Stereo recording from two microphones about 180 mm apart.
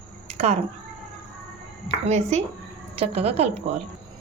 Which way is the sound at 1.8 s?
40° right (ahead or behind).